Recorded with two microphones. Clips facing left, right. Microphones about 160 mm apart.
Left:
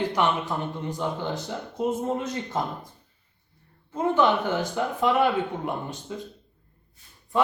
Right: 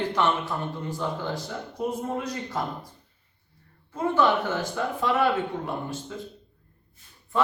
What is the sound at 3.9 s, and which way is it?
Speech, 20° left (ahead or behind).